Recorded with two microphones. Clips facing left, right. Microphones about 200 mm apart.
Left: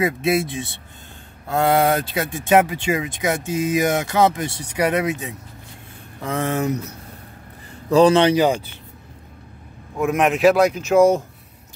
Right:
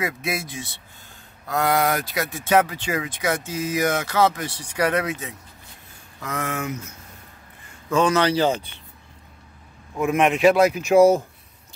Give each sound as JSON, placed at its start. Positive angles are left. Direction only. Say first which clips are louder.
{"t": 0.0, "sound": "speech", "louder": "left 8 dB", "side_deg": 25}
{"t": 6.2, "sound": "speech", "louder": "left 6 dB", "side_deg": 30}
{"t": 9.9, "sound": "speech", "louder": "left 1 dB", "side_deg": 0}